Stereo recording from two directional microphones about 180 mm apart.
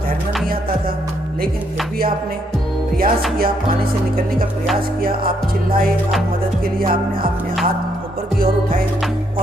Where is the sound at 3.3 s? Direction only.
55° right (ahead or behind).